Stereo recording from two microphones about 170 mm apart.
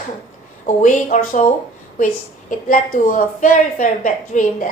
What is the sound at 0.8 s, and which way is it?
Speech, 50° left (ahead or behind).